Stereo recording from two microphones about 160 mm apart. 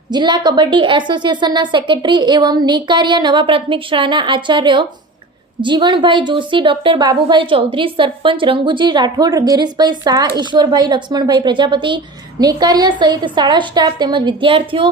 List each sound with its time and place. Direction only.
0.1 s a woman's voice: 30° right (ahead or behind)